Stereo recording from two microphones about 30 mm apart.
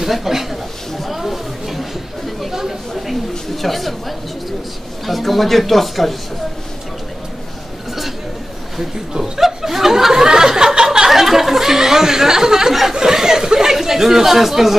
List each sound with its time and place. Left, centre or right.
0.0 s speech: centre
0.9 s chatter: centre
3.6 s a man's voice: centre
5.0 s a man's voice: centre
9.2 s a sound: centre
11.1 s speech: centre